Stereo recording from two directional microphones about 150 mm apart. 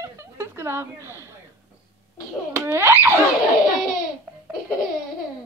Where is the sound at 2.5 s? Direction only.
15° right (ahead or behind).